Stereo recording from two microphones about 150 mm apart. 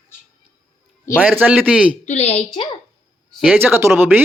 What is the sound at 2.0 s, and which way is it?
Speech, 45° left (ahead or behind).